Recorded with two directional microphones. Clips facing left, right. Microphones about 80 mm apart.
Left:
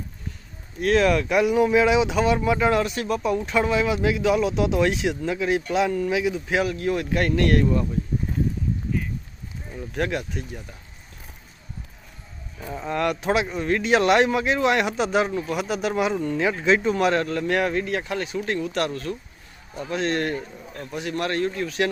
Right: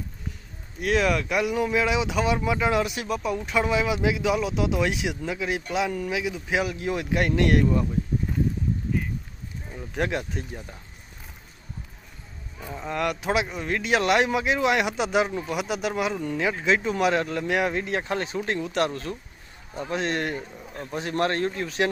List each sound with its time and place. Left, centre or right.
0.8 s speech: centre
9.9 s a man's voice: centre
12.7 s a man's voice: centre
20.9 s speech: right